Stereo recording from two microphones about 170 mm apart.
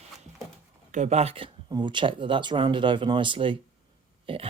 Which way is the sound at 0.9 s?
45° right (ahead or behind).